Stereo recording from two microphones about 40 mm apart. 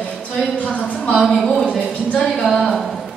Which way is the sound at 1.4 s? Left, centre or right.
Centre.